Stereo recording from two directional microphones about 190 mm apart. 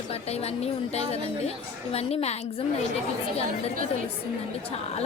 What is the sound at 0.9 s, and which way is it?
A woman's voice, 35° left (ahead or behind).